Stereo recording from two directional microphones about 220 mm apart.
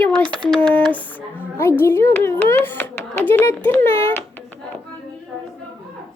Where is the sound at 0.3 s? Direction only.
Centre (ahead or behind).